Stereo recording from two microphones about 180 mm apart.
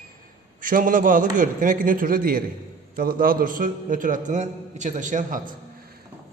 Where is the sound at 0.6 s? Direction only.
50° right (ahead or behind).